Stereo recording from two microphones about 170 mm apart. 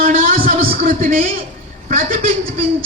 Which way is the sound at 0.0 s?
55° right (ahead or behind).